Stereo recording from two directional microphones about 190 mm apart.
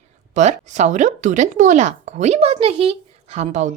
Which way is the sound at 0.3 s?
40° right (ahead or behind).